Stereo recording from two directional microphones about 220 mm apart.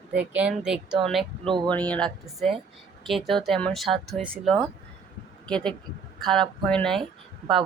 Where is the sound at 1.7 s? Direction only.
5° left (ahead or behind).